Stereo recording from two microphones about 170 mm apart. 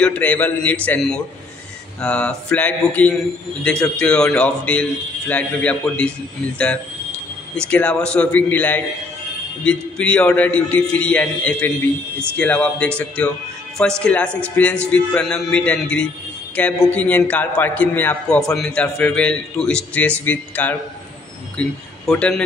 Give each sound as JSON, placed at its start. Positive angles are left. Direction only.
{"t": 0.0, "sound": "a man's voice", "side_deg": 10}
{"t": 7.5, "sound": "a man's voice", "side_deg": 5}